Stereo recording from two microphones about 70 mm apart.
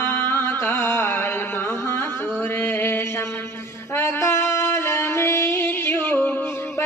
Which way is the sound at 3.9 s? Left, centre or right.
Left.